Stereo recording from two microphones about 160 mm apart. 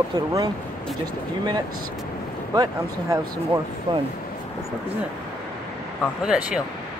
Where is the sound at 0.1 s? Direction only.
25° right (ahead or behind).